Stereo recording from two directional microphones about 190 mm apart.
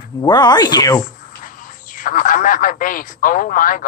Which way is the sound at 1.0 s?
45° left (ahead or behind).